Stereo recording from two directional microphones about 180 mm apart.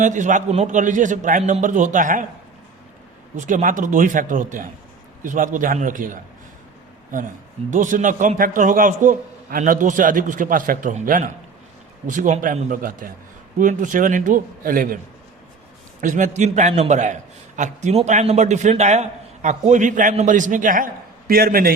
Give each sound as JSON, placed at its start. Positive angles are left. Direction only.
{"t": 0.0, "sound": "a man's voice", "side_deg": -45}
{"t": 3.3, "sound": "a man's voice", "side_deg": -45}
{"t": 16.0, "sound": "a man's voice", "side_deg": -45}